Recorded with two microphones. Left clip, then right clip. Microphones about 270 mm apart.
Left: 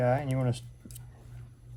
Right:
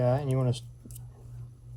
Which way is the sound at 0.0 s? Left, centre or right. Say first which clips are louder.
Even; left.